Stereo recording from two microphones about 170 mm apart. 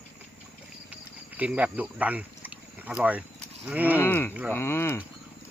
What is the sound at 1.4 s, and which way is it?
Speech, 10° right (ahead or behind).